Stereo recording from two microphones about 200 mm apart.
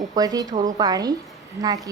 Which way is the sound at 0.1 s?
20° right (ahead or behind).